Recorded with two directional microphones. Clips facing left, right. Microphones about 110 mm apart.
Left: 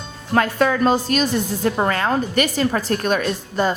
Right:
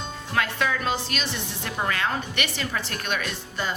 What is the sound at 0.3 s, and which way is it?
A woman's voice, 40° left (ahead or behind).